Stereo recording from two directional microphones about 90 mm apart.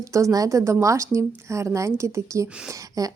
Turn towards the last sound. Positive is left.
turn(degrees=-40)  # may be behind; listen again after turning